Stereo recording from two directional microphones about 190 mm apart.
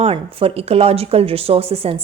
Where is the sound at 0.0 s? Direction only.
30° right (ahead or behind).